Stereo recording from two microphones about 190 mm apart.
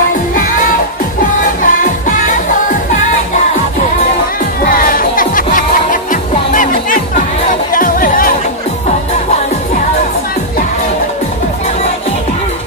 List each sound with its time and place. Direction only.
1.6 s music: 45° left (ahead or behind)
4.6 s music: 50° left (ahead or behind)